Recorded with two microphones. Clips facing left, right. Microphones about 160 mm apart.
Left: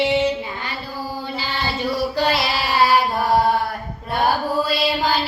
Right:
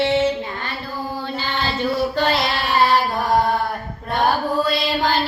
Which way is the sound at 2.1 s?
10° left (ahead or behind).